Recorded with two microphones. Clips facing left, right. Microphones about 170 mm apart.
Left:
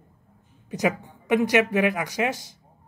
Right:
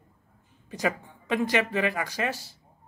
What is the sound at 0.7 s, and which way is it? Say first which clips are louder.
A woman's voice: left 4 dB; 15° left (ahead or behind).